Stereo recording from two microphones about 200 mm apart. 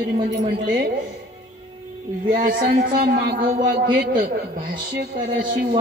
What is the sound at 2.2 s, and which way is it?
A woman's voice, 40° right (ahead or behind).